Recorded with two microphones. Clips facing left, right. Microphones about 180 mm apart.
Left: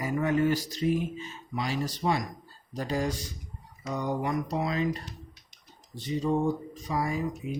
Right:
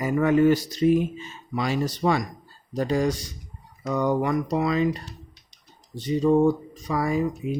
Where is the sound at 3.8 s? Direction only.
65° right (ahead or behind).